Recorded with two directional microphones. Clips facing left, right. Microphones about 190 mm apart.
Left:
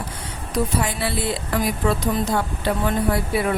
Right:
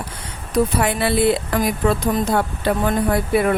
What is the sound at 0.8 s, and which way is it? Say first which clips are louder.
Speech: right 6 dB; 60° right (ahead or behind).